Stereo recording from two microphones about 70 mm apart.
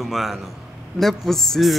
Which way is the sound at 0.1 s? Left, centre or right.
Centre.